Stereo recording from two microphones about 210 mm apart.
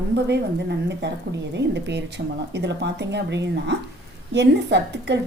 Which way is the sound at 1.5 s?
55° right (ahead or behind).